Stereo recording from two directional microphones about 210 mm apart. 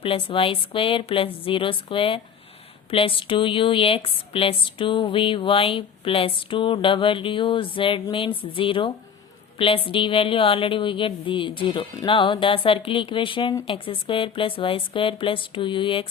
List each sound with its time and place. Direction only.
0.0 s speech: 25° left (ahead or behind)